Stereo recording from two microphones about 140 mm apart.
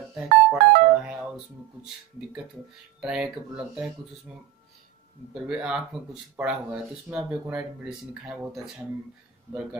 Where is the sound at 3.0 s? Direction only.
5° right (ahead or behind).